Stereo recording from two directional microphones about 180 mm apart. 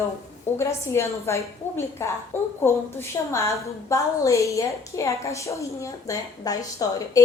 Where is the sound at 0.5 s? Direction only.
15° left (ahead or behind).